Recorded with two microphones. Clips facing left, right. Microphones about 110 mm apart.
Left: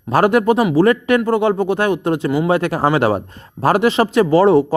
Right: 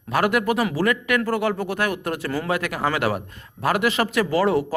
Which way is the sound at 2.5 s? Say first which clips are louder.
Left 7 dB; 30° left (ahead or behind).